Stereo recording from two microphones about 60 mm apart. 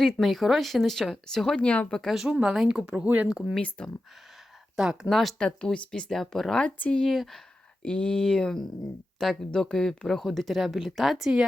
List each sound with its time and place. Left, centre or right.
0.0 s speech: centre
1.5 s speech: left
2.0 s speech: centre
3.6 s speech: centre
5.0 s speech: centre
5.4 s speech: centre
6.6 s speech: left
7.0 s speech: centre
7.8 s speech: centre